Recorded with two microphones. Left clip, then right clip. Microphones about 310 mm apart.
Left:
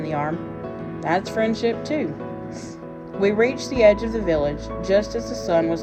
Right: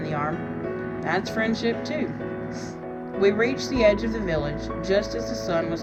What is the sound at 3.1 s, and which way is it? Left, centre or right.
Speech, left.